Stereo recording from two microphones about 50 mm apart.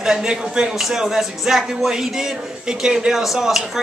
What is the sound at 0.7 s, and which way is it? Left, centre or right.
Speech, centre.